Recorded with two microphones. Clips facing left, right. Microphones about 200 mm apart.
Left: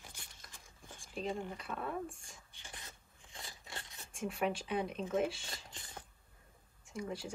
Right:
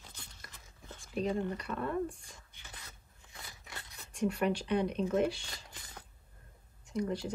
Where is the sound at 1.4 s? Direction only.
Centre (ahead or behind).